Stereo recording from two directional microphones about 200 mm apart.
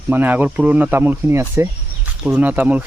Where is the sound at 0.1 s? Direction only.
10° right (ahead or behind).